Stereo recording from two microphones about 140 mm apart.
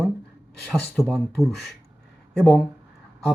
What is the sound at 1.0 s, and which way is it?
Speech, centre (ahead or behind).